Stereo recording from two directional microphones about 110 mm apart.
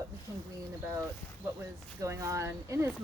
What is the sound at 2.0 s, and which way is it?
Speech, 30° right (ahead or behind).